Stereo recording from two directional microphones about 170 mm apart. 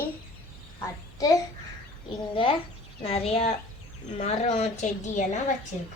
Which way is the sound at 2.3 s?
30° left (ahead or behind).